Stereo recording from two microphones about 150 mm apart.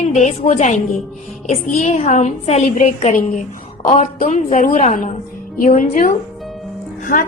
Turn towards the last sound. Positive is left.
turn(degrees=65)  # may be behind; listen again after turning